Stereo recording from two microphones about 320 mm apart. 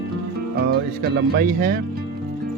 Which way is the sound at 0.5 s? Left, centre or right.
Right.